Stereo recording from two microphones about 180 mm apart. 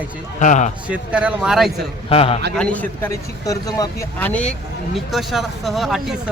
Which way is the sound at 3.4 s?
20° left (ahead or behind).